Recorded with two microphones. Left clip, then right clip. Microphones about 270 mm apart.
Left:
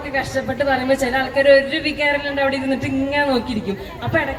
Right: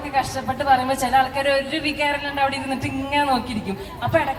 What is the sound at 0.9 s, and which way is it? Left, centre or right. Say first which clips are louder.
A woman's voice: even; right.